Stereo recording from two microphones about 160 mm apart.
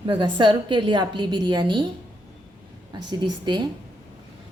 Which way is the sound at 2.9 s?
30° right (ahead or behind).